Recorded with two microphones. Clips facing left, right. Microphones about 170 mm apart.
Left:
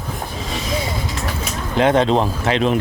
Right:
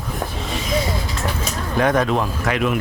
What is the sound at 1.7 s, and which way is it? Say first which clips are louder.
Speech: left 3 dB; 25° left (ahead or behind).